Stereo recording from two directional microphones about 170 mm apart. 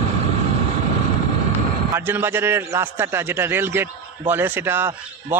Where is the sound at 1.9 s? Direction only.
10° right (ahead or behind).